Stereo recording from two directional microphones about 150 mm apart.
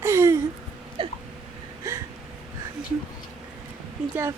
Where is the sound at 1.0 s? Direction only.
35° right (ahead or behind).